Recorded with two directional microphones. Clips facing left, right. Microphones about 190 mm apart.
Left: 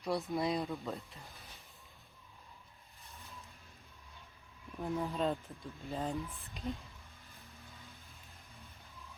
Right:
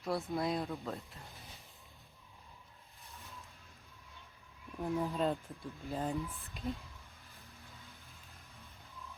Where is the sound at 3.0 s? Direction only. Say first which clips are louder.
Even; centre (ahead or behind).